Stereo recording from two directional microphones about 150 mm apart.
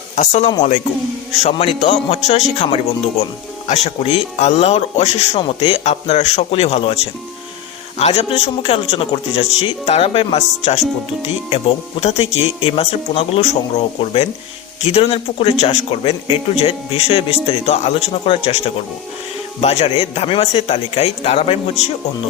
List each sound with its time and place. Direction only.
0.2 s speech: 50° left (ahead or behind)
3.7 s speech: 45° left (ahead or behind)